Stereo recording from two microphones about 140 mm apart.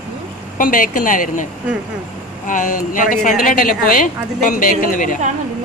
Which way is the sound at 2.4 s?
70° left (ahead or behind).